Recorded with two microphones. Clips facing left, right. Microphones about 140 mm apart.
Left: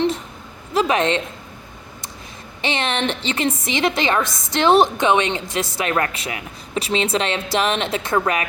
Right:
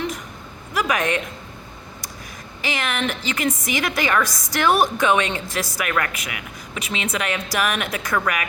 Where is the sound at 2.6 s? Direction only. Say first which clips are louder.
Left 3 dB; 30° left (ahead or behind).